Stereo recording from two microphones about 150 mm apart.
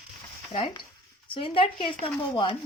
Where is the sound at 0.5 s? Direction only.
35° left (ahead or behind).